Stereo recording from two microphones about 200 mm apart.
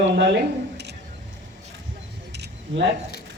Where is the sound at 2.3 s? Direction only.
55° right (ahead or behind).